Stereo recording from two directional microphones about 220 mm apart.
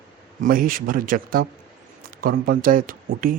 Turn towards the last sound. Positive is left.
turn(degrees=-40)  # may be behind; listen again after turning